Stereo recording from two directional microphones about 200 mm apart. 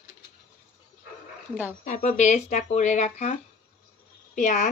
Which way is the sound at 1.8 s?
40° left (ahead or behind).